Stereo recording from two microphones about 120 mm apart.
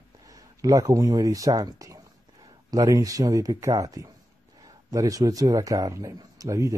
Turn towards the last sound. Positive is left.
turn(degrees=-25)  # may be behind; listen again after turning